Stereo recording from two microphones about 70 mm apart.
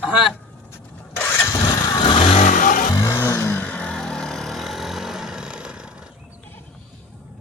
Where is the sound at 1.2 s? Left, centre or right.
Left.